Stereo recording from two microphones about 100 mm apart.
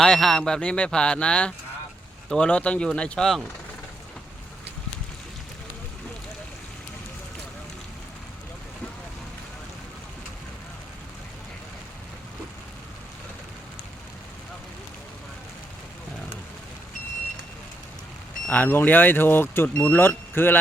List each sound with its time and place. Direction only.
0.0 s speech: 5° left (ahead or behind)
18.4 s speech: 15° left (ahead or behind)